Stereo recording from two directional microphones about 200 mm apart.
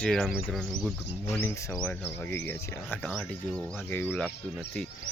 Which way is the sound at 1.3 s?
10° left (ahead or behind).